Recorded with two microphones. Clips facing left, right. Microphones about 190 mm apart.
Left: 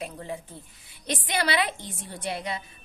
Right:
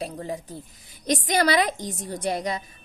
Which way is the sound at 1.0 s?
40° right (ahead or behind).